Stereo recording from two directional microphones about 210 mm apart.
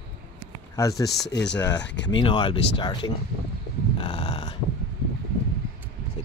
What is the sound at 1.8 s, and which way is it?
Speech, 55° left (ahead or behind).